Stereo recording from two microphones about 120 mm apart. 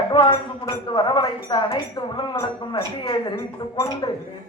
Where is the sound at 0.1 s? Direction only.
45° left (ahead or behind).